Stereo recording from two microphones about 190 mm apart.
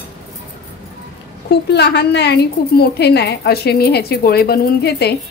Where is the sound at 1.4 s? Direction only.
60° left (ahead or behind).